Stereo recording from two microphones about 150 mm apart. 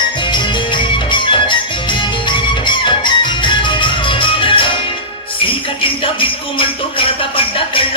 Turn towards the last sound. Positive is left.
turn(degrees=35)  # may be behind; listen again after turning